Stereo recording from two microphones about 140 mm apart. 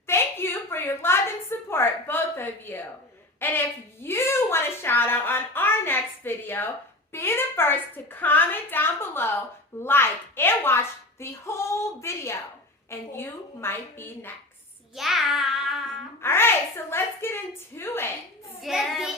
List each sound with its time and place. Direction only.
0.1 s a woman's voice: 15° left (ahead or behind)
14.9 s child singing: centre (ahead or behind)
16.2 s a woman's voice: 15° left (ahead or behind)
18.6 s child singing: centre (ahead or behind)